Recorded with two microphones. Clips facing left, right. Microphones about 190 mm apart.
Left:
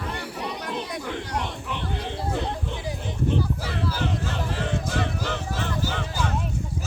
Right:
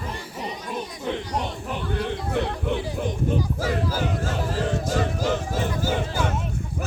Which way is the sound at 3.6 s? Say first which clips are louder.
Right 3 dB; 45° right (ahead or behind).